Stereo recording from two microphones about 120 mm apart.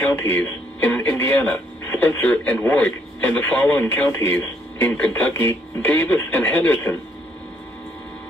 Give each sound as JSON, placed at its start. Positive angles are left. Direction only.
{"t": 0.0, "sound": "speech", "side_deg": 20}